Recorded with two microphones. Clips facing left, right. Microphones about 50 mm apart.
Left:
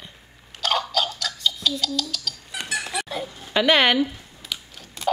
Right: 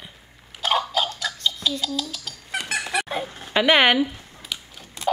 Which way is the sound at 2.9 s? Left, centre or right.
Right.